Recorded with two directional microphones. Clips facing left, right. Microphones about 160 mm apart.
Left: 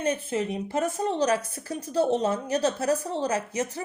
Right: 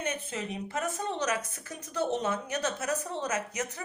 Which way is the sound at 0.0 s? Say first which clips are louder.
Left 8 dB; 30° left (ahead or behind).